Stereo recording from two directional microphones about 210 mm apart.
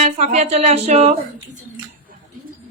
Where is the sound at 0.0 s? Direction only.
30° right (ahead or behind).